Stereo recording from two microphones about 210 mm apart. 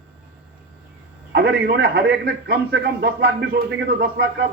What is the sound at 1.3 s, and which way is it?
A man's voice, 50° right (ahead or behind).